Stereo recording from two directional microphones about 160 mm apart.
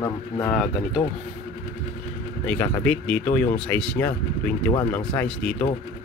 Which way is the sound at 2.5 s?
10° left (ahead or behind).